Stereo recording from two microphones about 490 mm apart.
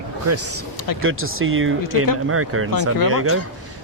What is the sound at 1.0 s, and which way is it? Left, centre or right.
Speech, right.